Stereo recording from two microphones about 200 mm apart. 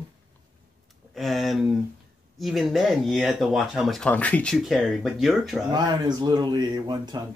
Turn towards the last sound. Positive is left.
turn(degrees=-20)  # may be behind; listen again after turning